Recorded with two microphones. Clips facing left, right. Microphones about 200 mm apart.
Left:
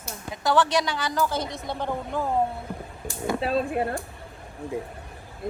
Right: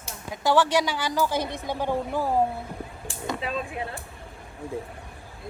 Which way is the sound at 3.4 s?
40° left (ahead or behind).